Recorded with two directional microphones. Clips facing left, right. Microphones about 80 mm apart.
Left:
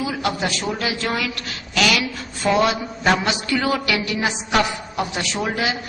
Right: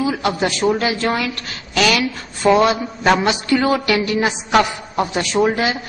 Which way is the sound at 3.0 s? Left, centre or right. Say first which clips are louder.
Right 4 dB; right.